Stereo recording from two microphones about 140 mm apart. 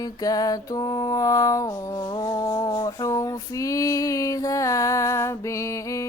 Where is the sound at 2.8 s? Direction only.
25° left (ahead or behind).